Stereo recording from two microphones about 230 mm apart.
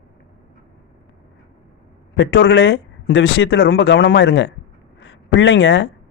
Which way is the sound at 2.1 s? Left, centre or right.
Left.